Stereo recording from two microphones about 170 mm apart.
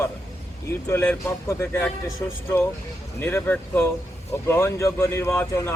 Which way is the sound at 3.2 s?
10° left (ahead or behind).